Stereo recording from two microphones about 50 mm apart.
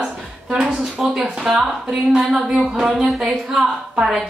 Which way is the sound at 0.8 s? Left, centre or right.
Centre.